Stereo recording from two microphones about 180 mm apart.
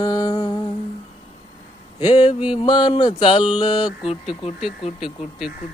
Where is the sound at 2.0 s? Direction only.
25° left (ahead or behind).